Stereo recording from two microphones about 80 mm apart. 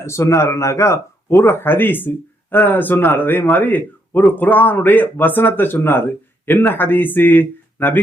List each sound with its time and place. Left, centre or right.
0.0 s speech: left
1.4 s a man's voice: left